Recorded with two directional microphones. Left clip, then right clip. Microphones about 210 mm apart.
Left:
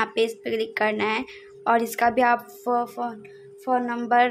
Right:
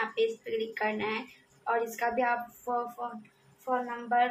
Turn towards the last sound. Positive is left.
turn(degrees=50)  # may be behind; listen again after turning